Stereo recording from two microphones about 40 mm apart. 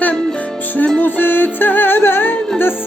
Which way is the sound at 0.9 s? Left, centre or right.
Left.